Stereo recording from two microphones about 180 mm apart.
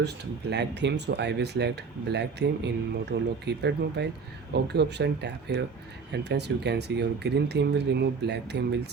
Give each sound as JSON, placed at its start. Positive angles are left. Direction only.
{"t": 0.5, "sound": "speech", "side_deg": -70}